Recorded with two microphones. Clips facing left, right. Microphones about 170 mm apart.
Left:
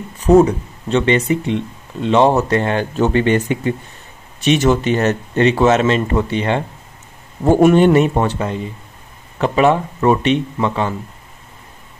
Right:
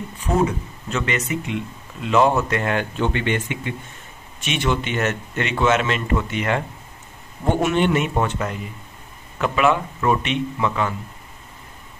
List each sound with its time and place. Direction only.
0.2 s speech: 40° left (ahead or behind)
7.4 s speech: 40° left (ahead or behind)